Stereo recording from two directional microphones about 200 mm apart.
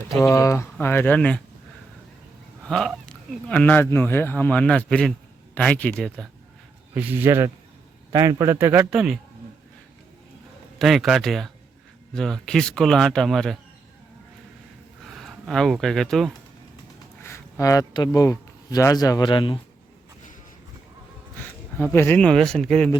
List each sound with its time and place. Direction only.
0.1 s speech: 15° left (ahead or behind)
2.6 s speech: centre (ahead or behind)
6.9 s speech: 10° right (ahead or behind)
10.8 s speech: centre (ahead or behind)
15.0 s speech: centre (ahead or behind)
17.2 s speech: 15° left (ahead or behind)
21.9 s speech: 10° left (ahead or behind)